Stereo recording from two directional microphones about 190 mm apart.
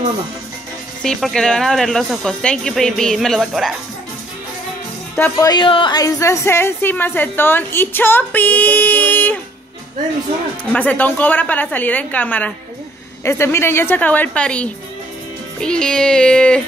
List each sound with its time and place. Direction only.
1.0 s speech: 5° left (ahead or behind)
5.1 s speech: 10° left (ahead or behind)
5.5 s a woman's voice: 25° left (ahead or behind); by 9.4 s 10° left (ahead or behind)
10.6 s a woman's voice: 5° left (ahead or behind)